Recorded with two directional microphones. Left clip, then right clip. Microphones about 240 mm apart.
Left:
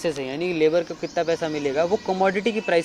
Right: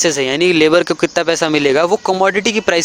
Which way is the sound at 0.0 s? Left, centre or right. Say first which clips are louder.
Right 12 dB; right.